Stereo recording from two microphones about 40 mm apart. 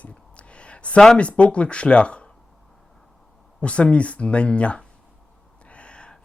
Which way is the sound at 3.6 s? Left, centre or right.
Left.